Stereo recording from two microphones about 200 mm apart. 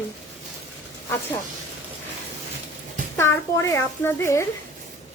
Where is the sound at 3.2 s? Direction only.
15° left (ahead or behind).